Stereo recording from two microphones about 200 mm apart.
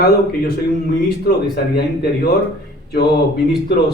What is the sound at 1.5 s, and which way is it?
Speech, 50° left (ahead or behind).